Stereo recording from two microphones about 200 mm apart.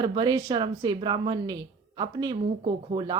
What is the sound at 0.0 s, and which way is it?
Speech, 20° right (ahead or behind).